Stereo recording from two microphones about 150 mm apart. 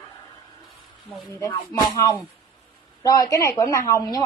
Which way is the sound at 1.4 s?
25° left (ahead or behind).